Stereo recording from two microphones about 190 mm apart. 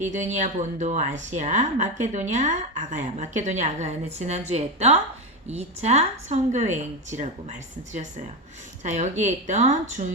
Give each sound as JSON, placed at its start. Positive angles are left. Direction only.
{"t": 0.0, "sound": "speech", "side_deg": -40}
{"t": 8.8, "sound": "speech", "side_deg": -40}